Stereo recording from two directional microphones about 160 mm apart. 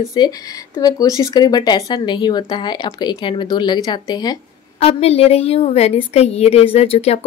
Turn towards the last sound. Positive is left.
turn(degrees=40)  # may be behind; listen again after turning